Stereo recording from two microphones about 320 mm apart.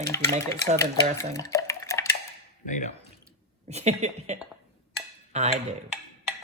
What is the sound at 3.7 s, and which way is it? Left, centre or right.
Speech, right.